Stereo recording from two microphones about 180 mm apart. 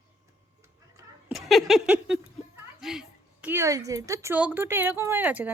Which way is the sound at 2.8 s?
5° right (ahead or behind).